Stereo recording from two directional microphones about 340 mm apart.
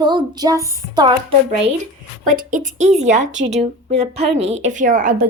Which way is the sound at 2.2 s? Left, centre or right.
Right.